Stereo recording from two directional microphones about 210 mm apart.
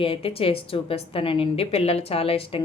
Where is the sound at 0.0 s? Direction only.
25° left (ahead or behind).